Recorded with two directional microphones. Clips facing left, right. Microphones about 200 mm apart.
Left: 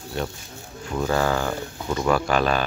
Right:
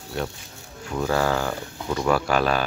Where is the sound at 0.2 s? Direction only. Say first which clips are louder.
Even; 5° right (ahead or behind).